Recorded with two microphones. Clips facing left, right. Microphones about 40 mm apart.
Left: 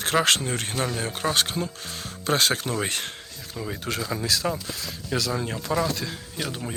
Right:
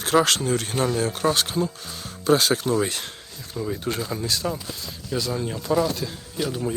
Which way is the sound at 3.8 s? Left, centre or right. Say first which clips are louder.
Right 1 dB; left.